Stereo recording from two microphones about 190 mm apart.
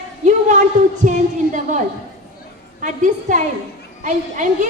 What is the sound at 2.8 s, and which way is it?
A woman's voice, 40° right (ahead or behind).